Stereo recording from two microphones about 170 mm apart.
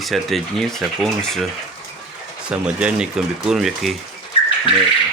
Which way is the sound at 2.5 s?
5° right (ahead or behind).